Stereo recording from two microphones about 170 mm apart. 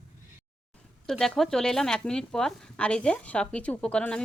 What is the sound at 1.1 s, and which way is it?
Speech, centre (ahead or behind).